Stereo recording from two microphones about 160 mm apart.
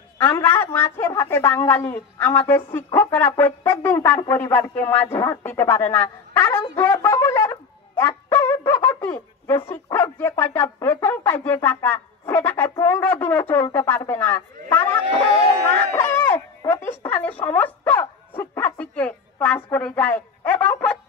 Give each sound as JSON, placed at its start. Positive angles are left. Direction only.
{"t": 0.2, "sound": "speech", "side_deg": 15}
{"t": 6.6, "sound": "wind instrument", "side_deg": 15}
{"t": 9.7, "sound": "speech", "side_deg": 15}